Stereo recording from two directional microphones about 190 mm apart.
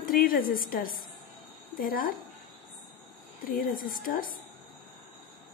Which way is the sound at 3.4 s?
50° left (ahead or behind).